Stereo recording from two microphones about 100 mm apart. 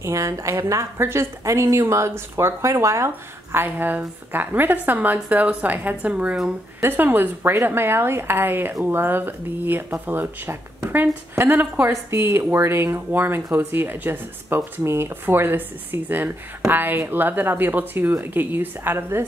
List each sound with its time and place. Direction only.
0.0 s a woman's voice: 30° right (ahead or behind)
3.5 s speech: 20° right (ahead or behind)
6.8 s speech: 20° right (ahead or behind)